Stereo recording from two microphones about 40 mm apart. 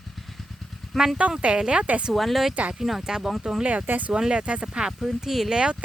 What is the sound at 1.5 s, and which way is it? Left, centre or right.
Speech, right.